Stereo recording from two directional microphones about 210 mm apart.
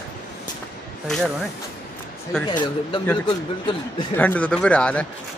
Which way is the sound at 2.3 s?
5° left (ahead or behind).